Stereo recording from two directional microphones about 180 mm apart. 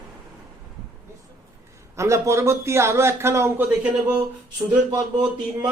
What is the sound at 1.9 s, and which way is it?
A man's voice, 15° right (ahead or behind).